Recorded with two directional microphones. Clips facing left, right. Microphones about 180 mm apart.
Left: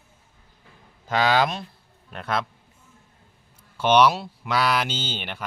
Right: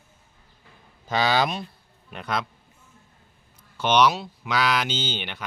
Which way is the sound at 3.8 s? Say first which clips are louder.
Left 2 dB; 5° left (ahead or behind).